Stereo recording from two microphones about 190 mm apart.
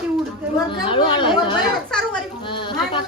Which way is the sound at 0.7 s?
25° left (ahead or behind).